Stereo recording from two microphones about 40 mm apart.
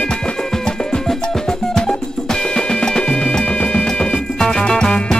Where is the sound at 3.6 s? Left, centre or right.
Left.